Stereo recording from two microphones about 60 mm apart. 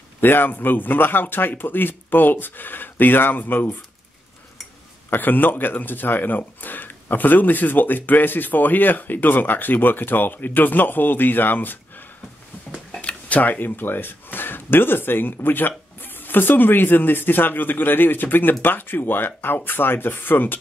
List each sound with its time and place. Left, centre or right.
0.2 s speech: left
5.1 s speech: left
12.9 s a sound: centre
13.4 s speech: left